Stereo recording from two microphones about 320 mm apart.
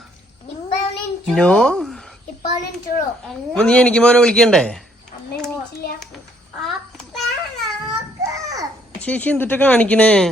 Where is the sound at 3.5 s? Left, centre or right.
Centre.